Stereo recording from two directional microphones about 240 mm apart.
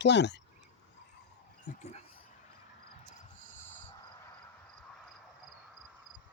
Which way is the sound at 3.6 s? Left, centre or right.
Centre.